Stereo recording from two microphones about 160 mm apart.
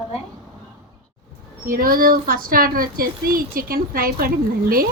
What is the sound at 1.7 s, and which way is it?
Speech, 65° right (ahead or behind).